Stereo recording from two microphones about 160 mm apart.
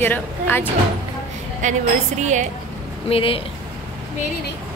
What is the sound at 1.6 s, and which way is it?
Speech, 50° right (ahead or behind).